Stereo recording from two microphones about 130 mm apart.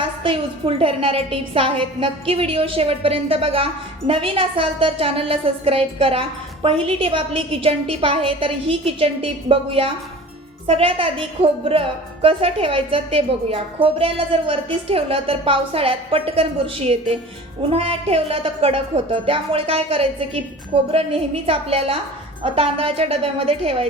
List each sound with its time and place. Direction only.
0.0 s a woman's voice: 45° right (ahead or behind)